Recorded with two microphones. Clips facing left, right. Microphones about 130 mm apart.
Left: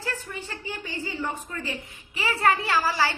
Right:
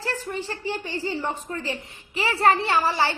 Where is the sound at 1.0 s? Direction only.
35° right (ahead or behind).